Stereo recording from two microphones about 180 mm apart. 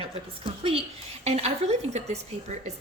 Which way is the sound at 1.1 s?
35° right (ahead or behind).